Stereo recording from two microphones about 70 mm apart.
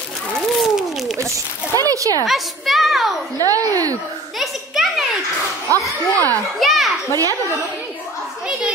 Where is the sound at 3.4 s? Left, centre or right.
Right.